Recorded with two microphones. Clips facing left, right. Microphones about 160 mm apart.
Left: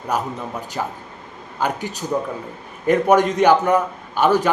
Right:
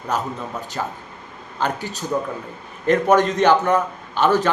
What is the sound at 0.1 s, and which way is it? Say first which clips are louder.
A man's voice: left 1 dB; 10° left (ahead or behind).